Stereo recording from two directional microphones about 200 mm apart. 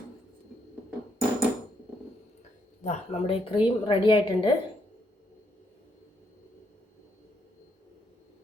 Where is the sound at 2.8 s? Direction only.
30° left (ahead or behind).